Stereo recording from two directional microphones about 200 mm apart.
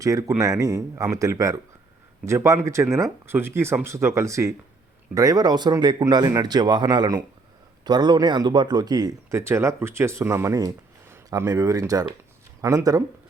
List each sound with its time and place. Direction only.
0.0 s speech: 15° right (ahead or behind)